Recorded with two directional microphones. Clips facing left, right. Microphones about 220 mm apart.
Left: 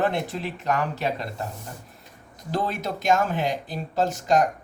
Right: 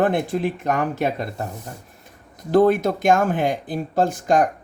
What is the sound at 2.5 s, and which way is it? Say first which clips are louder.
Speech: right 12 dB; 55° right (ahead or behind).